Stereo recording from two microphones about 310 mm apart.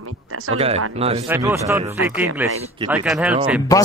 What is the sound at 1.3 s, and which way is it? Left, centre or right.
Speech, centre.